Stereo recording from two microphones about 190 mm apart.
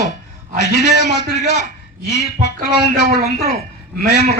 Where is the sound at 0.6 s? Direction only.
60° left (ahead or behind).